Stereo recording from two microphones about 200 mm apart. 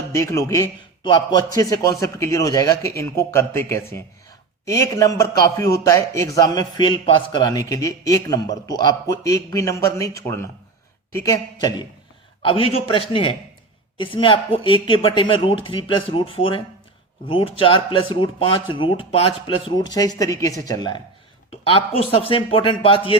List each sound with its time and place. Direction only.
0.1 s a man's voice: 15° left (ahead or behind)
12.4 s speech: 25° left (ahead or behind)